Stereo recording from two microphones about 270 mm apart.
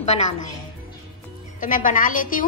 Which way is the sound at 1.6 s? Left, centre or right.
Left.